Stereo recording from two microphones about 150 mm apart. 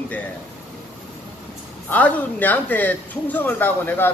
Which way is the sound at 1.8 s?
10° left (ahead or behind).